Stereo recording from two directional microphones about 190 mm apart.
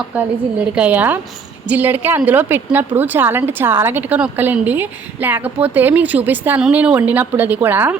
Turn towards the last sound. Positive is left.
turn(degrees=-10)  # may be behind; listen again after turning